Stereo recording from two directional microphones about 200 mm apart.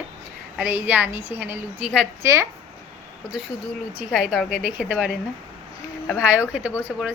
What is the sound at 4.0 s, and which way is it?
A woman's voice, 5° right (ahead or behind).